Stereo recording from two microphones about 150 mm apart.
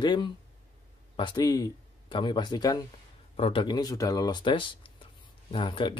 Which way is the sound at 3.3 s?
40° left (ahead or behind).